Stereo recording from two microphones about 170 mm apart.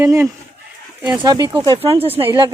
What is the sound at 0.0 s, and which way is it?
Speech, 20° right (ahead or behind).